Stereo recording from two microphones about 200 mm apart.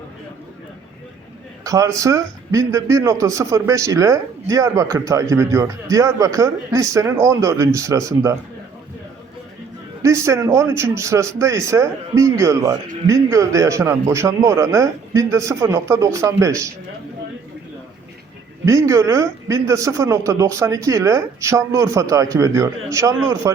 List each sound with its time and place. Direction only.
1.6 s a man's voice: 15° right (ahead or behind)
10.0 s a man's voice: 15° right (ahead or behind)
18.6 s a man's voice: 15° right (ahead or behind)